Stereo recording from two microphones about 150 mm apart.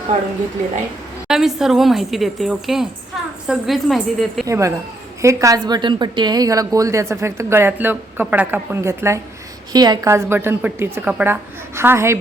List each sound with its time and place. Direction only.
1.3 s a woman's voice: 5° right (ahead or behind)
4.4 s a woman's voice: 20° right (ahead or behind)
10.1 s a woman's voice: 15° right (ahead or behind)